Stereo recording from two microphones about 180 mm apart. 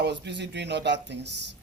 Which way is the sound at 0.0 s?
75° right (ahead or behind).